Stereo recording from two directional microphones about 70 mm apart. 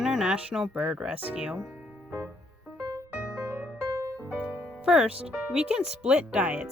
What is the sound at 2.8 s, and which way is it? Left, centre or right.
Music, right.